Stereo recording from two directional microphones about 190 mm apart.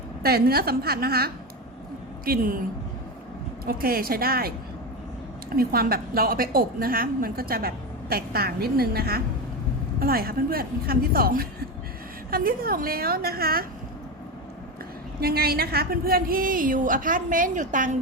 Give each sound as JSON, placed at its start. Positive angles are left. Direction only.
{"t": 0.2, "sound": "a woman's voice", "side_deg": -55}
{"t": 3.7, "sound": "a woman's voice", "side_deg": -50}
{"t": 5.5, "sound": "a woman's voice", "side_deg": -50}
{"t": 15.2, "sound": "a woman's voice", "side_deg": -55}